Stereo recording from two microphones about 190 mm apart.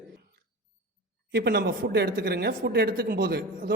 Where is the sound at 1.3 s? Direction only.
60° right (ahead or behind).